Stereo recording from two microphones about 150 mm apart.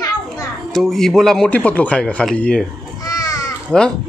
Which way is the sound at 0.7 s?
Centre (ahead or behind).